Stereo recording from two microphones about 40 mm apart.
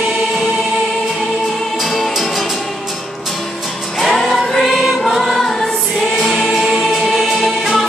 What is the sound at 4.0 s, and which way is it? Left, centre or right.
Music, centre.